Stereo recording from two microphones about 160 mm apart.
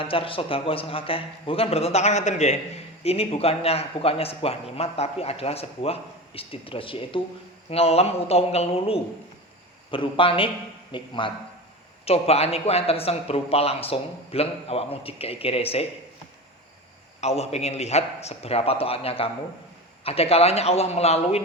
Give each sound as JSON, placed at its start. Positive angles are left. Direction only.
{"t": 0.0, "sound": "a man's voice", "side_deg": 35}
{"t": 17.2, "sound": "a man's voice", "side_deg": 40}